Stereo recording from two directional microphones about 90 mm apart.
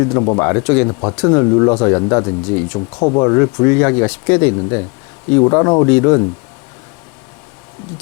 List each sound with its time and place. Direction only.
0.0 s speech: 30° left (ahead or behind)
1.3 s speech: 25° left (ahead or behind)